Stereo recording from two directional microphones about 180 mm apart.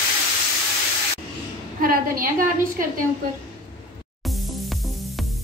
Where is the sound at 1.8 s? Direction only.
50° right (ahead or behind).